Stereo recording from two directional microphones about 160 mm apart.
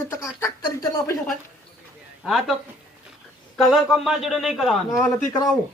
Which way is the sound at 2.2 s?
Centre (ahead or behind).